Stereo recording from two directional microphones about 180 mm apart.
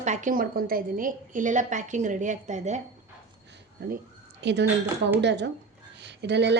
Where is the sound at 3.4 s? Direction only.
70° right (ahead or behind).